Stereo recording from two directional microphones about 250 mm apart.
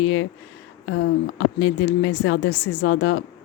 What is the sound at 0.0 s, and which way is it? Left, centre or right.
A woman's voice, left.